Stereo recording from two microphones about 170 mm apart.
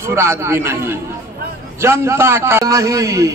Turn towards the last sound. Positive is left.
turn(degrees=-15)  # may be behind; listen again after turning